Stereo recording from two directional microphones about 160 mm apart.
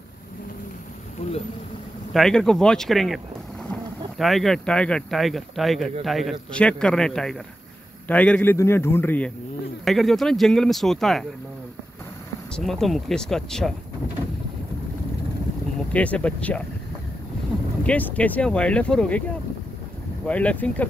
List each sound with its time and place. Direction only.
1.2 s speech: 40° left (ahead or behind)
2.1 s speech: 5° left (ahead or behind)
4.2 s speech: centre (ahead or behind)
9.8 s speech: centre (ahead or behind)
12.5 s speech: centre (ahead or behind)
15.9 s speech: 10° left (ahead or behind)
17.8 s speech: 10° left (ahead or behind)
20.2 s speech: 10° left (ahead or behind)